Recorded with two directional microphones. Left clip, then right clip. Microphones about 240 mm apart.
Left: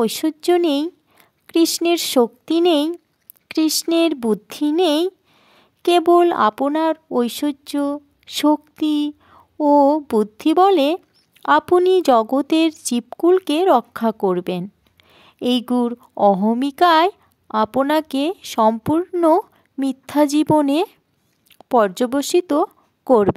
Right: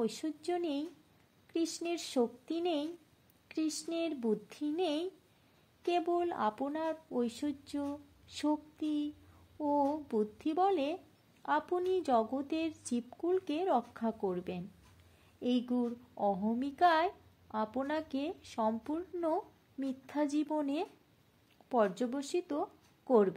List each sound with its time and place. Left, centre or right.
0.0 s a woman's voice: left